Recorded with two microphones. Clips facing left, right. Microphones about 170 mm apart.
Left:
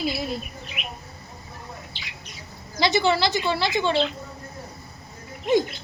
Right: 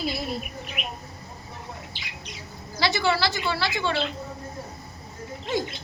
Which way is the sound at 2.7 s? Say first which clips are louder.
Left 3 dB; 20° left (ahead or behind).